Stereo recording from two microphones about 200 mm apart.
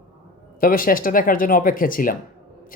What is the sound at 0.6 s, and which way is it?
Speech, 45° left (ahead or behind).